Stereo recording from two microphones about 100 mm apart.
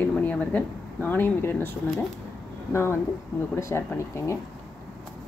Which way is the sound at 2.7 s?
25° left (ahead or behind).